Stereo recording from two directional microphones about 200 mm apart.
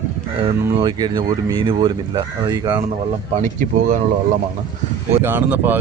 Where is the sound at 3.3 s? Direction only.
40° right (ahead or behind).